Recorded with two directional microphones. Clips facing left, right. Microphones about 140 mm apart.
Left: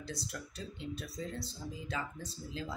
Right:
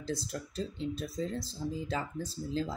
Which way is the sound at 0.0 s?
35° right (ahead or behind).